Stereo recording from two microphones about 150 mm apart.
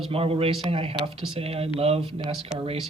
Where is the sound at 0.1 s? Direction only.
40° right (ahead or behind).